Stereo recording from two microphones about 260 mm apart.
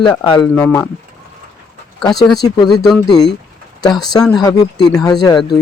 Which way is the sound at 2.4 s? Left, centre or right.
Centre.